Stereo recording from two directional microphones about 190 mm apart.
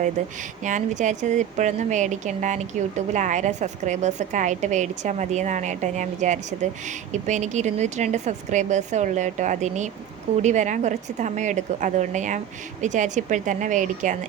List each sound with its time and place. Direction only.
0.6 s a woman's voice: 40° right (ahead or behind)